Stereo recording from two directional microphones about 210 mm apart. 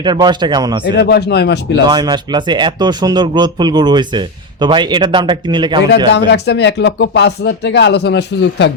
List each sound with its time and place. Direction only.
0.0 s a man's voice: 20° right (ahead or behind)
0.9 s speech: 50° left (ahead or behind)
1.9 s a man's voice: 20° right (ahead or behind)
6.1 s speech: 50° left (ahead or behind)